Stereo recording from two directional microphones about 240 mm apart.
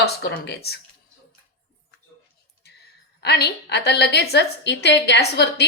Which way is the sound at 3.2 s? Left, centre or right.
Left.